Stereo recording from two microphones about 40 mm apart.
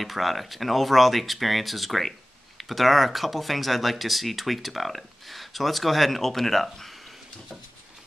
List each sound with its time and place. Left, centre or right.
0.0 s speech: centre